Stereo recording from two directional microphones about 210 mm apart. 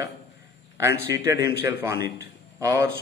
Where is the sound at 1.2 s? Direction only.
15° right (ahead or behind).